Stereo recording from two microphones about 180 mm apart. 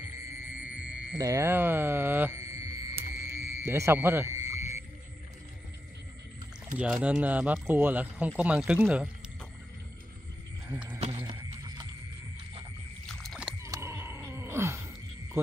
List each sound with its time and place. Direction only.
0.3 s music: 10° right (ahead or behind)
1.1 s speech: 20° right (ahead or behind)
3.2 s music: 10° right (ahead or behind)
6.8 s speech: 5° right (ahead or behind)
10.7 s a sound: 10° right (ahead or behind)
11.1 s horse: 20° right (ahead or behind)
13.0 s rowboat: centre (ahead or behind)
13.6 s a sound: 15° right (ahead or behind)